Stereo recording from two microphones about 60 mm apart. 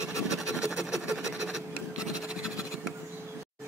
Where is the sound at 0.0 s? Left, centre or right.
Left.